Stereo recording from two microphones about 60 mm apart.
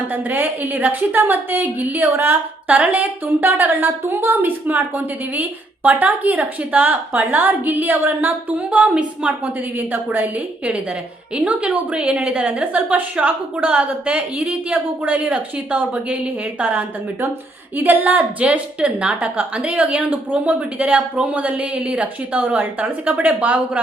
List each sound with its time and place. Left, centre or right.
0.1 s a woman's voice: right
9.7 s a woman's voice: right
11.3 s a woman's voice: centre